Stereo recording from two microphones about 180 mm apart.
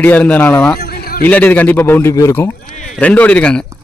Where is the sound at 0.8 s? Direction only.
55° left (ahead or behind).